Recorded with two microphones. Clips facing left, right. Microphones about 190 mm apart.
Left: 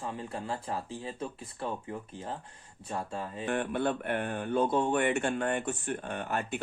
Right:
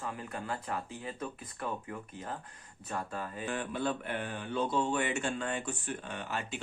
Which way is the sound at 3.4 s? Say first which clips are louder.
Left 5 dB; 60° left (ahead or behind).